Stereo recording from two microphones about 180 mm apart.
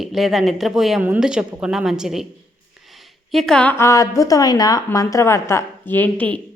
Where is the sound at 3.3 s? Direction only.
Centre (ahead or behind).